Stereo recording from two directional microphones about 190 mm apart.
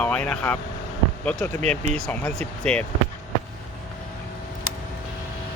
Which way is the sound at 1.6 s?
35° right (ahead or behind).